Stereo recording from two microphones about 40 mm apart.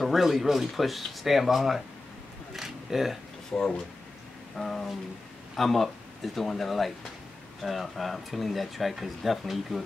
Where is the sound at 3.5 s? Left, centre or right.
Left.